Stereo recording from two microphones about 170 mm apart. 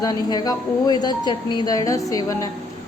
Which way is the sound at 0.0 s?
25° left (ahead or behind).